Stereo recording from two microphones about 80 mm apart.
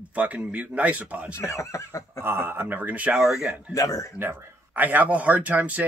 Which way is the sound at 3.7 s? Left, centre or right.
Left.